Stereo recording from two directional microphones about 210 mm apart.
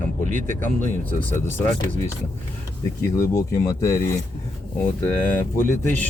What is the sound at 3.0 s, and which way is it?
Speech, 15° left (ahead or behind).